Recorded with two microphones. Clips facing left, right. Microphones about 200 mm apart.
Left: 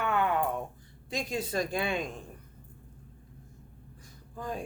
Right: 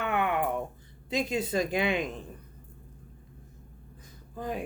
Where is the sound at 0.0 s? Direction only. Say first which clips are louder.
Even; 20° right (ahead or behind).